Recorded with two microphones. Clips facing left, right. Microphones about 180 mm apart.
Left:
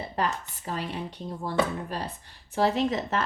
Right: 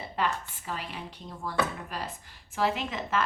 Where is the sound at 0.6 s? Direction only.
35° left (ahead or behind).